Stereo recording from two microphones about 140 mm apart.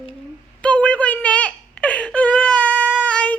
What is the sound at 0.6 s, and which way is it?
Whimper, 10° left (ahead or behind).